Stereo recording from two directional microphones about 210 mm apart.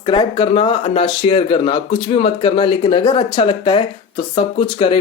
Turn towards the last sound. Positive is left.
turn(degrees=25)  # may be behind; listen again after turning